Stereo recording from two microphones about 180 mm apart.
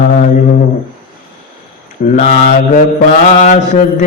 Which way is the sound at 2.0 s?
50° left (ahead or behind).